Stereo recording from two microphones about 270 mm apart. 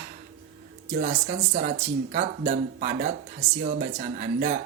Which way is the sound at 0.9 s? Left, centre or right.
Right.